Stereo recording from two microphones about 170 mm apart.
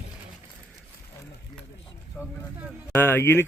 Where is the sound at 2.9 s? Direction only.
15° left (ahead or behind).